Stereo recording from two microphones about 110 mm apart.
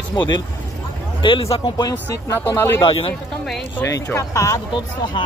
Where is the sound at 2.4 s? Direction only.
20° left (ahead or behind).